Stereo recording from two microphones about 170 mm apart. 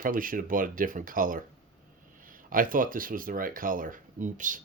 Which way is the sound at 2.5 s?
55° right (ahead or behind).